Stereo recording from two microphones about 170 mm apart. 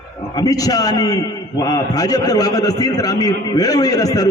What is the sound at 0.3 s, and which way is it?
A man's voice, 20° left (ahead or behind).